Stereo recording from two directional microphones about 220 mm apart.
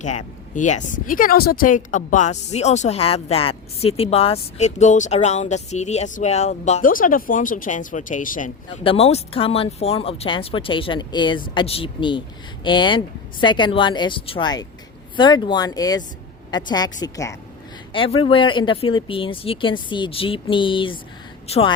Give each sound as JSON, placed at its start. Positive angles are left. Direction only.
{"t": 0.0, "sound": "speech", "side_deg": 35}
{"t": 8.8, "sound": "a woman's voice", "side_deg": 25}